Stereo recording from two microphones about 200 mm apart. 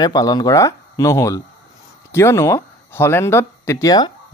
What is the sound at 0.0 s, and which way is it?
Speech, 20° left (ahead or behind).